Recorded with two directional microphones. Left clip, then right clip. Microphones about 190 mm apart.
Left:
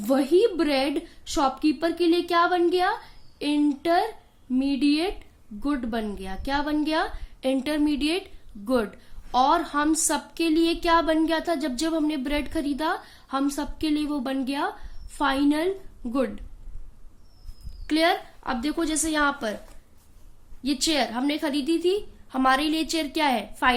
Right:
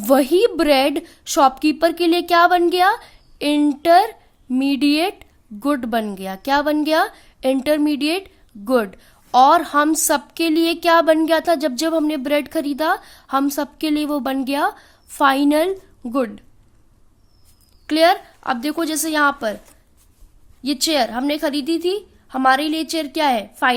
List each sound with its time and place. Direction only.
0.0 s a woman's voice: 45° right (ahead or behind)
17.8 s a woman's voice: 40° right (ahead or behind)
20.6 s a woman's voice: 40° right (ahead or behind)